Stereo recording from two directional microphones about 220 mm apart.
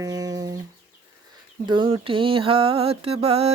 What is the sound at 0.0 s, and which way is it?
Music, 15° right (ahead or behind).